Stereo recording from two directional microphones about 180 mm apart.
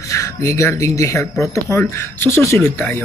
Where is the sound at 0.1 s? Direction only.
15° left (ahead or behind).